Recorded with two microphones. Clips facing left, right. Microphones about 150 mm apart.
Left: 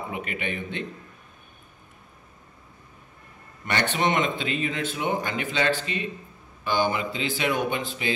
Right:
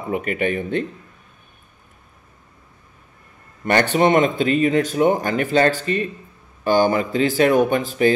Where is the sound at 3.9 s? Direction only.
45° right (ahead or behind).